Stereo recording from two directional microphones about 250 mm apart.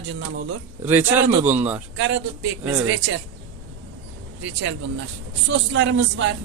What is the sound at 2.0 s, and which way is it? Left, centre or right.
Speech, right.